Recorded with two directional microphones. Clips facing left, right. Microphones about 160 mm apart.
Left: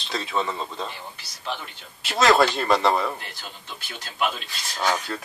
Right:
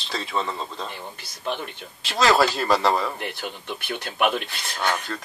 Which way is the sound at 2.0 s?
Centre (ahead or behind).